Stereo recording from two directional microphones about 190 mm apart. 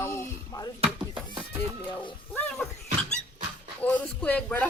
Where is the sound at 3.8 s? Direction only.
5° left (ahead or behind).